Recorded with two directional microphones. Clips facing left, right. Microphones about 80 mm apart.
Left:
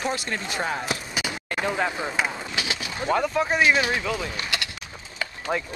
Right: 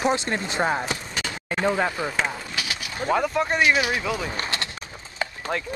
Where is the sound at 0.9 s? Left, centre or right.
Centre.